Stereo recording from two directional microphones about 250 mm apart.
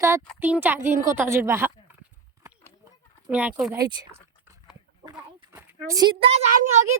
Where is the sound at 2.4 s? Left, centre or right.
Centre.